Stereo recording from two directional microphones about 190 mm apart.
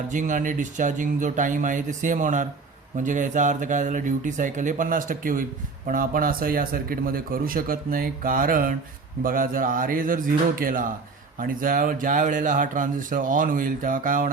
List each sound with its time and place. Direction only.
0.1 s speech: 40° right (ahead or behind)